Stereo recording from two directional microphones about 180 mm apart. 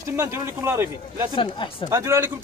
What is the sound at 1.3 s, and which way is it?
Speech, 25° left (ahead or behind).